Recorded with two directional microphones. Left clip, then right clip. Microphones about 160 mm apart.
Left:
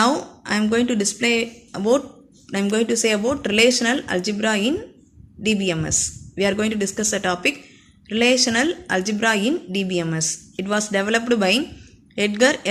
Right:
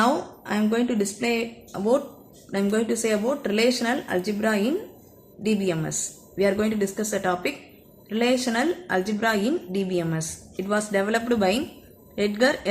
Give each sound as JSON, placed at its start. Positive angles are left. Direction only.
{"t": 0.0, "sound": "a woman's voice", "side_deg": 20}